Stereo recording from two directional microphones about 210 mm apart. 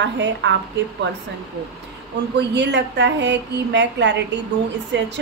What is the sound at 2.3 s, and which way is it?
A woman's voice, 55° right (ahead or behind).